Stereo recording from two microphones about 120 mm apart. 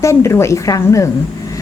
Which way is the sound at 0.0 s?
25° left (ahead or behind).